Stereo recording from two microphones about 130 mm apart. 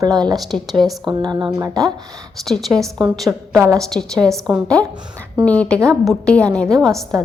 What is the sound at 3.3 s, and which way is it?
Speech, 20° right (ahead or behind).